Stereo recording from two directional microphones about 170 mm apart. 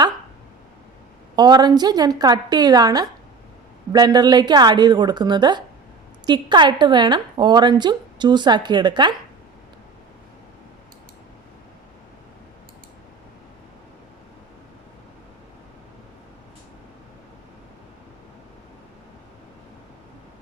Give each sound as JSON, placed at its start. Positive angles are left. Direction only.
{"t": 1.4, "sound": "a woman's voice", "side_deg": -25}